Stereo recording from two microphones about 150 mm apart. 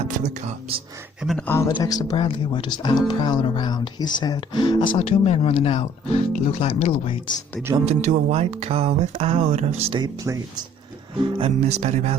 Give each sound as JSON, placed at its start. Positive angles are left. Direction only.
{"t": 0.0, "sound": "speech", "side_deg": -50}
{"t": 1.2, "sound": "speech", "side_deg": 0}
{"t": 1.6, "sound": "speech", "side_deg": 25}
{"t": 7.9, "sound": "speech", "side_deg": -45}
{"t": 9.4, "sound": "speech", "side_deg": -55}
{"t": 9.9, "sound": "speech", "side_deg": -25}
{"t": 11.3, "sound": "speech", "side_deg": -40}